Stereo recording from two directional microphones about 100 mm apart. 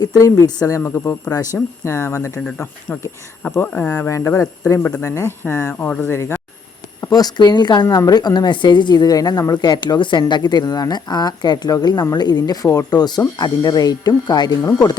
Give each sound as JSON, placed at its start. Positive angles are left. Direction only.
{"t": 0.0, "sound": "speech", "side_deg": 35}
{"t": 0.9, "sound": "speech", "side_deg": 25}
{"t": 3.6, "sound": "speech", "side_deg": 25}
{"t": 7.1, "sound": "speech", "side_deg": 40}
{"t": 14.6, "sound": "speech", "side_deg": 30}